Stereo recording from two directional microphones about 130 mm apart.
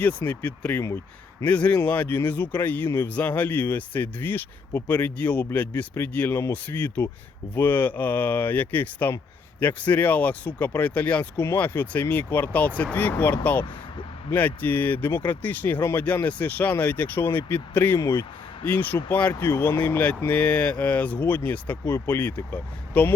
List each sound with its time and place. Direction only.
0.3 s speech: 10° left (ahead or behind)